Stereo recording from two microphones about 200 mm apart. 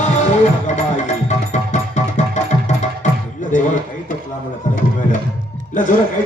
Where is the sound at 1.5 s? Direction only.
35° left (ahead or behind).